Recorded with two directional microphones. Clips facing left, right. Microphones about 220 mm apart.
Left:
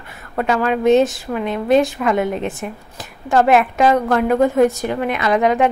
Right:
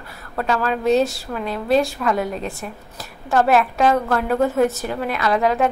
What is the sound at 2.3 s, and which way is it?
Speech, 5° left (ahead or behind).